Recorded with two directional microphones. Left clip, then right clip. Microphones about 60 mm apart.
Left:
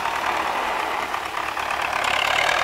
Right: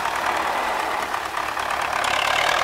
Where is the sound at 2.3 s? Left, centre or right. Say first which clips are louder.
Even; centre.